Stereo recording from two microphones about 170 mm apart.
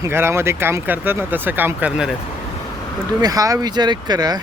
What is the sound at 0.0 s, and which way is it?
Speech, 15° right (ahead or behind).